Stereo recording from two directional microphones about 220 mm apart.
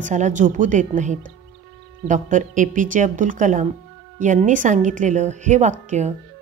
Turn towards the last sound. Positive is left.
turn(degrees=-35)  # may be behind; listen again after turning